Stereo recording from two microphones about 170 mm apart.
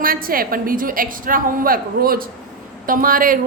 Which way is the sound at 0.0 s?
60° right (ahead or behind).